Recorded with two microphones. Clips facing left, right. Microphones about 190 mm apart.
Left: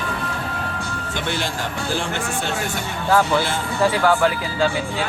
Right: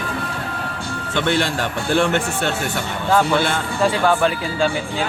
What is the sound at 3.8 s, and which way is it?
Speech, 20° right (ahead or behind).